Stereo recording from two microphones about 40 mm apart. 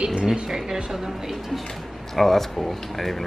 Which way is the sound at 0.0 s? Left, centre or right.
Right.